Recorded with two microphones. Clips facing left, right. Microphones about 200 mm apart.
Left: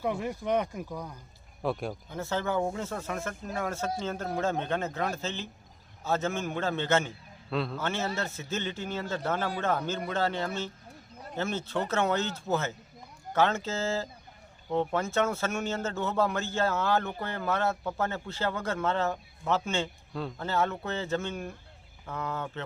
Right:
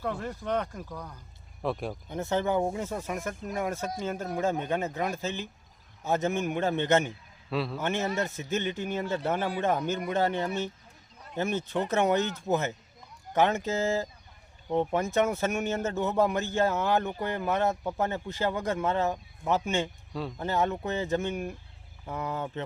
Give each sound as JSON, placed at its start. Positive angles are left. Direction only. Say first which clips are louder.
{"t": 0.0, "sound": "speech", "louder": "left 2 dB", "side_deg": 10}
{"t": 1.6, "sound": "speech", "louder": "even", "side_deg": 0}
{"t": 2.0, "sound": "a man's voice", "louder": "right 4 dB", "side_deg": -20}
{"t": 7.5, "sound": "speech", "louder": "right 1 dB", "side_deg": -5}
{"t": 7.8, "sound": "a man's voice", "louder": "right 3 dB", "side_deg": -15}